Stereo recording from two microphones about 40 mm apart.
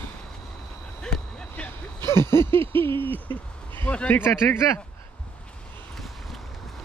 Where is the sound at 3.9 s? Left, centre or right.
Left.